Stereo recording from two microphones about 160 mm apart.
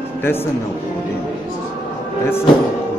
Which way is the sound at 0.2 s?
15° left (ahead or behind).